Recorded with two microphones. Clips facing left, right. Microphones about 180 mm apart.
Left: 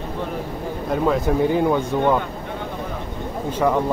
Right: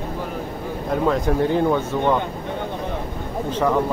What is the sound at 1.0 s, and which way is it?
Speech, 5° left (ahead or behind).